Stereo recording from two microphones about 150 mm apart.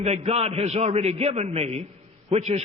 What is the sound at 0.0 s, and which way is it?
A man's voice, 45° right (ahead or behind).